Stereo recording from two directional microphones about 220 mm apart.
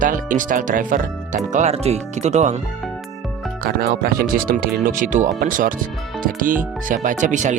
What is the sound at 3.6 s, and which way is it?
Speech, 45° right (ahead or behind).